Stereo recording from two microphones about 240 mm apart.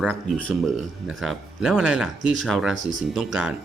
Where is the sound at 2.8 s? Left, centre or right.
Right.